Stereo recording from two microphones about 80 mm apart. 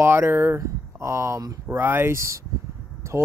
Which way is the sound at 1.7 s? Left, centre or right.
Right.